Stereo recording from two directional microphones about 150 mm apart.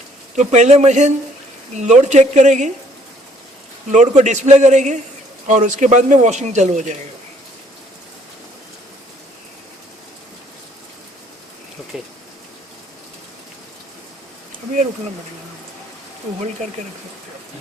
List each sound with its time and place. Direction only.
0.3 s speech: 50° right (ahead or behind)
3.9 s speech: 55° right (ahead or behind)